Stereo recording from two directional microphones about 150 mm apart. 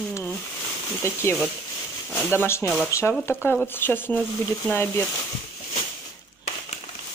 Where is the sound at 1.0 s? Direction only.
20° left (ahead or behind).